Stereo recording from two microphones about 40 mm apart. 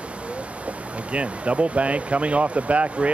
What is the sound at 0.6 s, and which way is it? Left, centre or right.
Speech, right.